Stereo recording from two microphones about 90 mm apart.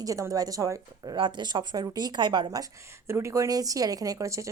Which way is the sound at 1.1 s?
60° right (ahead or behind).